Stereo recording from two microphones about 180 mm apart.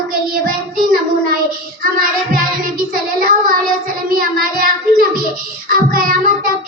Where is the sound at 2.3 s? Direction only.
50° right (ahead or behind).